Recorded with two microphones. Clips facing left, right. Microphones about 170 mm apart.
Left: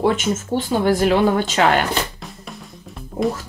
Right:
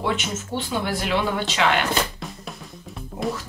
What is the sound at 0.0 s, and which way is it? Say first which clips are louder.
Speech: left 7 dB; 45° left (ahead or behind).